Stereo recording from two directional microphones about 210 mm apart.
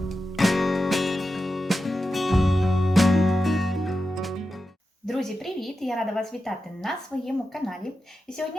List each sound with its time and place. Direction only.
0.0 s music: centre (ahead or behind)
5.0 s speech: centre (ahead or behind)